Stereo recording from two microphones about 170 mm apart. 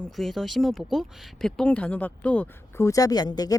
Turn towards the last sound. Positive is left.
turn(degrees=20)  # may be behind; listen again after turning